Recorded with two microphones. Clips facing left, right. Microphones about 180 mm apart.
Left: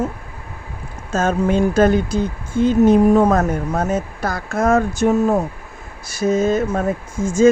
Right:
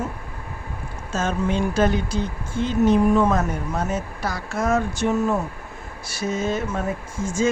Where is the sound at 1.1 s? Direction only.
50° left (ahead or behind).